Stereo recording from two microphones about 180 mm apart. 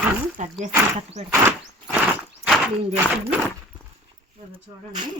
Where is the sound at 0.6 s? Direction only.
40° right (ahead or behind).